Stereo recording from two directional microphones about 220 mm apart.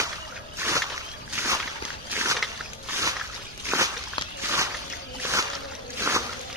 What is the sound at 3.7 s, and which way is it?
Walk, 15° right (ahead or behind).